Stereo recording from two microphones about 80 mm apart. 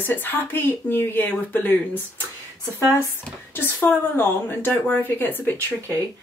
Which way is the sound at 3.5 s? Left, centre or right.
Left.